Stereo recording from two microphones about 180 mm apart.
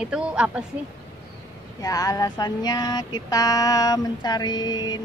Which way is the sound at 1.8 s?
20° left (ahead or behind).